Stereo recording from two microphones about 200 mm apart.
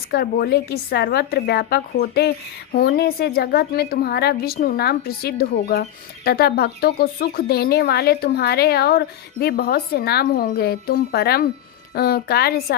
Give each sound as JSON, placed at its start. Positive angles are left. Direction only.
{"t": 0.1, "sound": "speech", "side_deg": 50}